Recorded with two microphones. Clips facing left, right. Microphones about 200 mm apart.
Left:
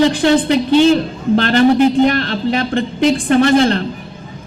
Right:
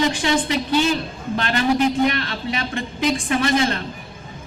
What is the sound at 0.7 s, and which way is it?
Speech, 30° left (ahead or behind).